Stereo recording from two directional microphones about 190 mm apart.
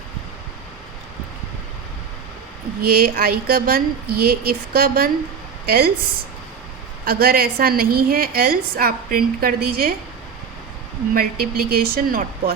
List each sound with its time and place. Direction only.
2.8 s a woman's voice: 50° right (ahead or behind)
7.0 s a woman's voice: 50° right (ahead or behind)
11.1 s a woman's voice: 50° right (ahead or behind)